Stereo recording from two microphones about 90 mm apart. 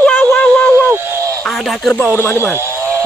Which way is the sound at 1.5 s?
Centre (ahead or behind).